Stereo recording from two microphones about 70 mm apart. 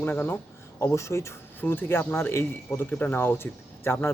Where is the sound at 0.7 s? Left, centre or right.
Left.